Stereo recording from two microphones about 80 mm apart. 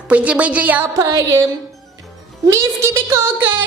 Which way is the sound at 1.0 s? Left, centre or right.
Right.